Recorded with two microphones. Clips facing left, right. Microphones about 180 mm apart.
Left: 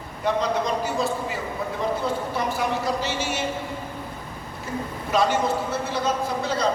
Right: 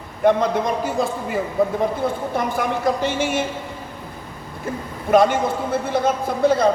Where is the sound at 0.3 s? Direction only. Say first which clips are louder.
Right 6 dB; 55° right (ahead or behind).